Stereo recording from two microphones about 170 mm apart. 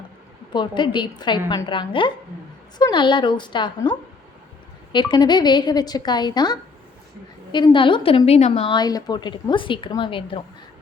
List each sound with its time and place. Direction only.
0.5 s a woman's voice: 25° left (ahead or behind)